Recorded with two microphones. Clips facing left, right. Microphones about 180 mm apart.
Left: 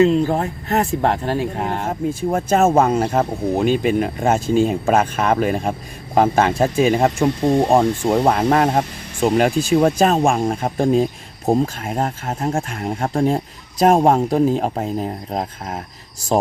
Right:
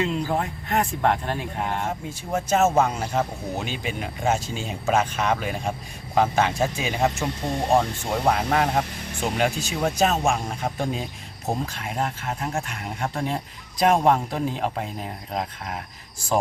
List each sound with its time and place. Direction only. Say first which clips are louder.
0.0 s speech: left 9 dB; 35° left (ahead or behind)
2.0 s speech: left 9 dB; 55° left (ahead or behind)
9.6 s speech: left 8 dB; 50° left (ahead or behind)